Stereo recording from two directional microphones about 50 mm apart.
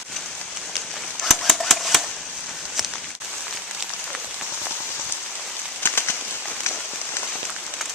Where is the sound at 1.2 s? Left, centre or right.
Centre.